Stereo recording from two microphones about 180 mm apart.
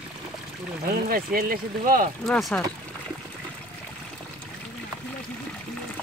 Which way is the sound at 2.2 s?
5° left (ahead or behind).